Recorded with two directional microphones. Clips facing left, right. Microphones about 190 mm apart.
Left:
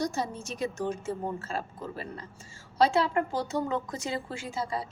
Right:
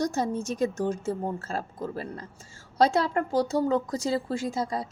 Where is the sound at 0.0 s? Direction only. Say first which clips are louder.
Right 4 dB; 45° right (ahead or behind).